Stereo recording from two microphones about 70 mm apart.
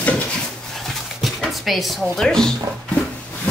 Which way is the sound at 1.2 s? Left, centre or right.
Centre.